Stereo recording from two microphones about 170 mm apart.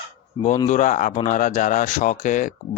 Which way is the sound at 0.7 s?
50° left (ahead or behind).